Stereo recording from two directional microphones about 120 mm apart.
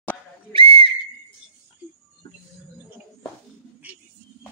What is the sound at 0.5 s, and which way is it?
Whistle, 45° right (ahead or behind).